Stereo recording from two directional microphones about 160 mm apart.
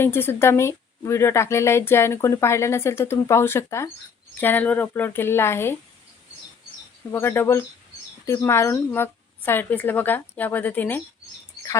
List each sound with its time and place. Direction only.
0.0 s speech: 15° left (ahead or behind)
7.1 s speech: 15° left (ahead or behind)